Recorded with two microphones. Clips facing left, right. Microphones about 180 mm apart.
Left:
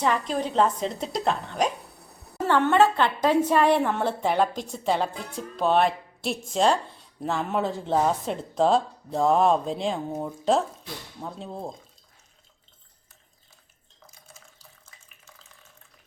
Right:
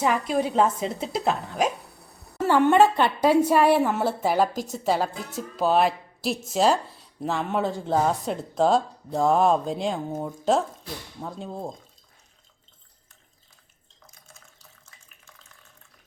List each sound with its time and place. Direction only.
0.0 s a woman's voice: 10° right (ahead or behind)
14.8 s water: centre (ahead or behind)